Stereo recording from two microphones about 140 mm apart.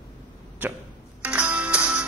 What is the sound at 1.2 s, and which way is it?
Music, 10° right (ahead or behind).